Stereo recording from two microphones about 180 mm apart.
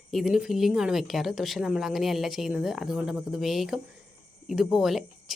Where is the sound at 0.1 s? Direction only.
Centre (ahead or behind).